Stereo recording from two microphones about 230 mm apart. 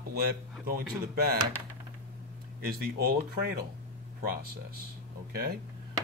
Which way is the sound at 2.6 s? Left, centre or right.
Right.